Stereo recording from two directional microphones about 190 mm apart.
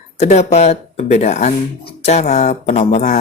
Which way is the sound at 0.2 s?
35° left (ahead or behind).